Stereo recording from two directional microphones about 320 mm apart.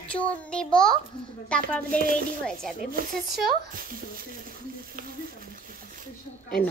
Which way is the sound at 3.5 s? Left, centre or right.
Right.